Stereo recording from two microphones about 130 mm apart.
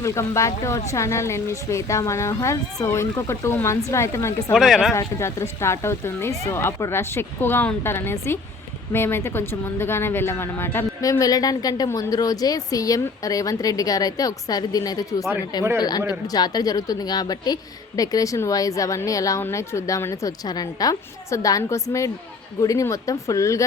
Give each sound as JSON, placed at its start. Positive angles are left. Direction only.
{"t": 0.0, "sound": "a woman's voice", "side_deg": 20}
{"t": 4.5, "sound": "speech", "side_deg": 0}
{"t": 4.9, "sound": "a woman's voice", "side_deg": 20}